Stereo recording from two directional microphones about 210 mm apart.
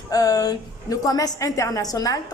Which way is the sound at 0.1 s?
15° left (ahead or behind).